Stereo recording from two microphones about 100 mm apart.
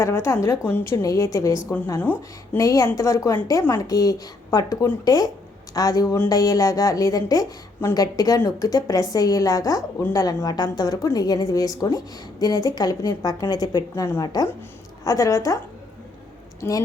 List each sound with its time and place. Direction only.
0.0 s a woman's voice: 30° left (ahead or behind)
2.0 s speech: 20° left (ahead or behind)
2.6 s a woman's voice: 35° left (ahead or behind)
16.6 s speech: 35° left (ahead or behind)